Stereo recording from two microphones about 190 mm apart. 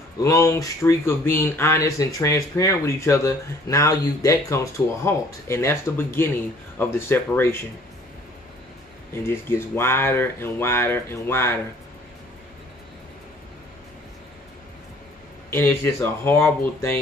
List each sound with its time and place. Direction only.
0.2 s speech: 15° left (ahead or behind)
9.1 s speech: 10° left (ahead or behind)
15.5 s speech: 10° left (ahead or behind)